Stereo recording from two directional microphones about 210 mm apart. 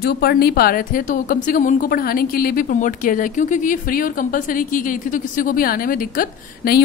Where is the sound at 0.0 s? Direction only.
50° left (ahead or behind).